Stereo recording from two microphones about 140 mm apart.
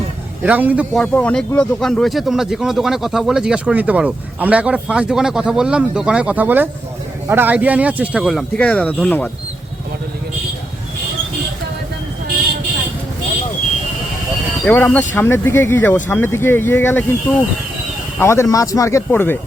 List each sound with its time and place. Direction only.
0.4 s speech: 10° right (ahead or behind)
0.9 s speech: 10° left (ahead or behind)
8.5 s speech: 10° left (ahead or behind)
14.6 s speech: 10° left (ahead or behind)
18.2 s speech: 20° left (ahead or behind)